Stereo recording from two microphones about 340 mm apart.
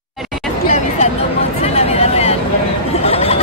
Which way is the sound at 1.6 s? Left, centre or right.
Centre.